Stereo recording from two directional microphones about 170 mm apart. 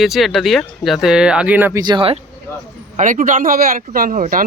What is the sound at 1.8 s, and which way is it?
Speech, 30° right (ahead or behind).